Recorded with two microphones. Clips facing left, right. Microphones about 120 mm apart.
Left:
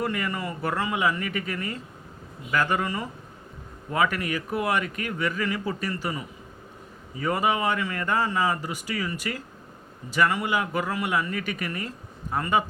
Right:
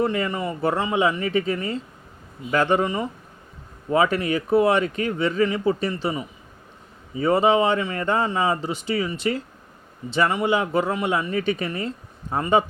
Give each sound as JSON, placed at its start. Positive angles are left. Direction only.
{"t": 0.0, "sound": "speech", "side_deg": -25}